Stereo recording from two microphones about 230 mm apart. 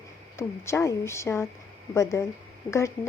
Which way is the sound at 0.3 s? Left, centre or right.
Centre.